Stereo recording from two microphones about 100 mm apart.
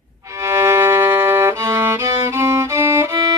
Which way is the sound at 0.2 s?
30° right (ahead or behind).